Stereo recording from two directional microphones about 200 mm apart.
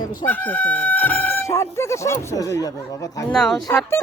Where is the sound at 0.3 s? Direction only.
10° left (ahead or behind).